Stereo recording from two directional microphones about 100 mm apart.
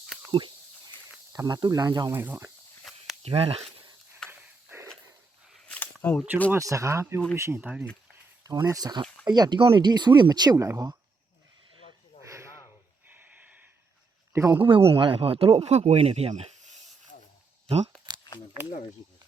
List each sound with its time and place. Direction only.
0.3 s speech: 55° right (ahead or behind)
1.3 s speech: 35° right (ahead or behind)
2.0 s speech: 20° right (ahead or behind)
3.2 s speech: 75° right (ahead or behind)
4.2 s a sound: 5° left (ahead or behind)
5.6 s a sound: 15° left (ahead or behind)
6.6 s speech: 35° right (ahead or behind)
9.6 s speech: 60° right (ahead or behind); by 10.9 s 35° right (ahead or behind)
13.1 s a sound: 15° right (ahead or behind)
14.5 s speech: 60° right (ahead or behind)
15.5 s speech: 90° right
17.7 s speech: 90° right